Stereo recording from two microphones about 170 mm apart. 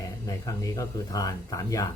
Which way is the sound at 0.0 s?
20° left (ahead or behind).